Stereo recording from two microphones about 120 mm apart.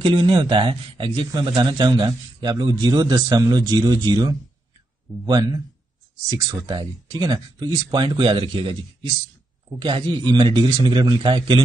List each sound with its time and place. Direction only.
0.0 s a man's voice: 45° right (ahead or behind)
9.8 s a man's voice: 45° right (ahead or behind)